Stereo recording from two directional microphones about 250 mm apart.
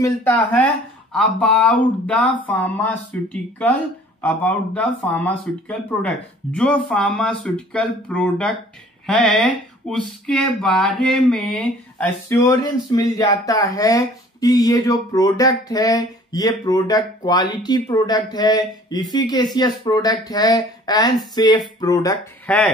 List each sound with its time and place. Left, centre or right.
0.0 s speech: centre